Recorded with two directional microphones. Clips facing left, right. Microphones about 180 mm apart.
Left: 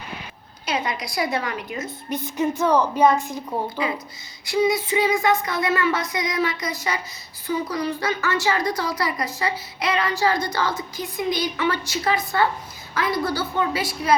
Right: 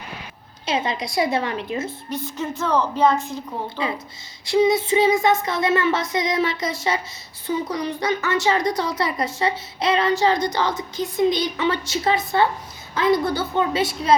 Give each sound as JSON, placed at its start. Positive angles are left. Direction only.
{"t": 0.6, "sound": "a woman's voice", "side_deg": -25}
{"t": 2.0, "sound": "a woman's voice", "side_deg": 15}
{"t": 3.8, "sound": "a woman's voice", "side_deg": -25}